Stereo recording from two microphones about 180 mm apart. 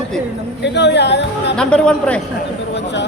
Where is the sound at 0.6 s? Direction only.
75° left (ahead or behind).